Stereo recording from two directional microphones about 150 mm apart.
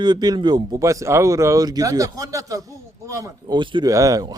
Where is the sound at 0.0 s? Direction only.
25° right (ahead or behind).